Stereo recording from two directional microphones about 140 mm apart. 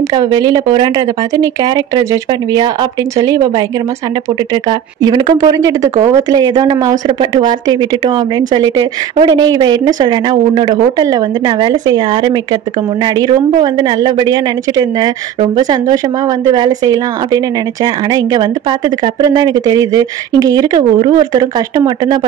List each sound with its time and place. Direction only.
0.1 s speech: 30° right (ahead or behind)
4.6 s speech: 30° right (ahead or behind)